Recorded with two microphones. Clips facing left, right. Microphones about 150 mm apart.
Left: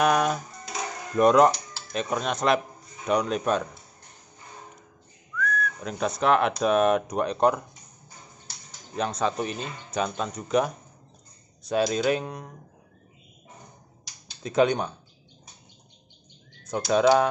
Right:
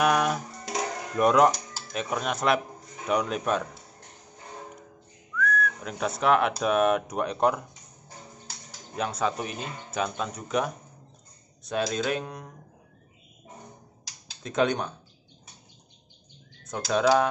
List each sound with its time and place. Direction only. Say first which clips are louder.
0.0 s music: left 1 dB; 5° right (ahead or behind)
0.5 s music: right 3 dB; 80° right
1.1 s speech: left 2 dB; 5° right (ahead or behind)
1.5 s a sound: left 1 dB; 40° right (ahead or behind)
1.9 s speech: left 2 dB; 5° right (ahead or behind)
5.4 s whistling: right 1 dB; centre (ahead or behind)
6.6 s speech: left 2 dB; 5° right (ahead or behind)
8.9 s speech: left 2 dB; 5° right (ahead or behind)
14.4 s speech: left 3 dB; centre (ahead or behind)
16.6 s speech: left 3 dB; 5° left (ahead or behind)